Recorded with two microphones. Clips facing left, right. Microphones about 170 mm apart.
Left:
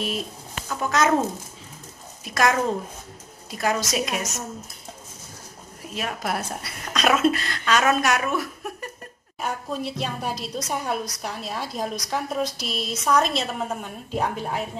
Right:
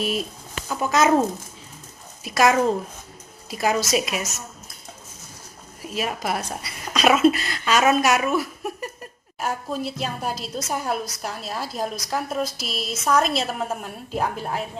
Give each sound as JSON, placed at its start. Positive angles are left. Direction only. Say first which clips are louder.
{"t": 0.7, "sound": "a child's voice", "louder": "right 2 dB", "side_deg": -10}
{"t": 2.2, "sound": "a woman's voice", "louder": "right 3 dB", "side_deg": -10}
{"t": 5.9, "sound": "a woman's voice", "louder": "right 2 dB", "side_deg": -5}